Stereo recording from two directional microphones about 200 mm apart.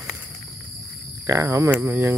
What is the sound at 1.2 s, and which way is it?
Cricket, 15° right (ahead or behind).